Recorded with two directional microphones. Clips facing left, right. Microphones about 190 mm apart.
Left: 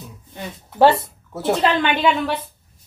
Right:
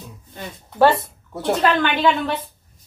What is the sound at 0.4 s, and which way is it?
Speech, 20° left (ahead or behind).